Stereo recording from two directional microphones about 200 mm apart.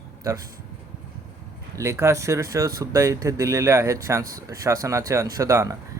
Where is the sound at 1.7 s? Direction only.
15° right (ahead or behind).